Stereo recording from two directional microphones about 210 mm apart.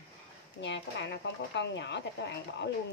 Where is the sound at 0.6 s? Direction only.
55° left (ahead or behind).